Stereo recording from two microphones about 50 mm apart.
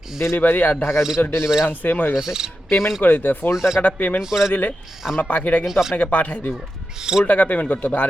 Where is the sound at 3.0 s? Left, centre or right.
Left.